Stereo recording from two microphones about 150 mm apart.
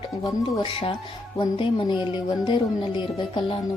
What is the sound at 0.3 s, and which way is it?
Speech, 30° left (ahead or behind).